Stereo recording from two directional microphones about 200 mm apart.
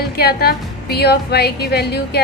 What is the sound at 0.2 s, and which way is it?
A woman's voice, 50° left (ahead or behind).